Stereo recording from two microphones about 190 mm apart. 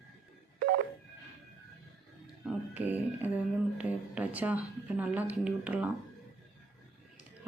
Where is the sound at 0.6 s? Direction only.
50° right (ahead or behind).